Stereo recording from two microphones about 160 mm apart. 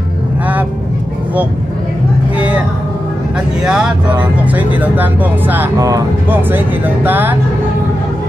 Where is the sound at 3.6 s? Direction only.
5° right (ahead or behind).